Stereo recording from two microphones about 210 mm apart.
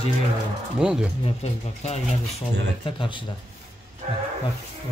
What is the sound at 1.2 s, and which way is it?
Speech, 30° left (ahead or behind).